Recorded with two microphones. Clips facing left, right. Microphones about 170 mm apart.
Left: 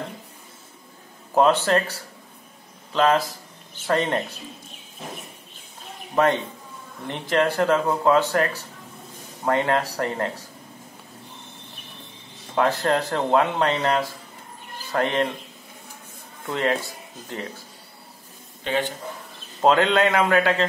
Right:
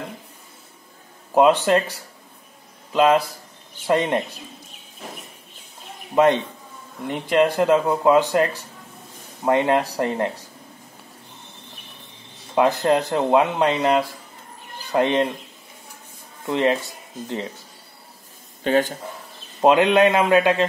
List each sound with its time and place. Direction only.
1.3 s speech: 15° right (ahead or behind)
2.9 s a man's voice: 15° right (ahead or behind)
7.1 s speech: 15° right (ahead or behind)
12.5 s speech: 15° right (ahead or behind)
16.4 s speech: 20° right (ahead or behind)
18.6 s speech: 45° right (ahead or behind)
19.6 s speech: 15° right (ahead or behind)